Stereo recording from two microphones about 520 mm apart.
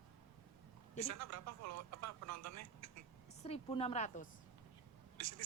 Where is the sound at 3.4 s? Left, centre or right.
Centre.